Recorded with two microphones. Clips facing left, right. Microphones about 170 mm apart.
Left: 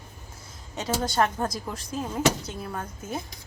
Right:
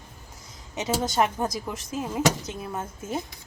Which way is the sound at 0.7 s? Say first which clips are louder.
Right 1 dB; 20° right (ahead or behind).